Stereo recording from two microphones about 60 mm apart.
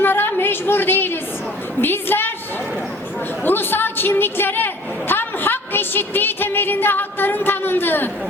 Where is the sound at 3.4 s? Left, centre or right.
Left.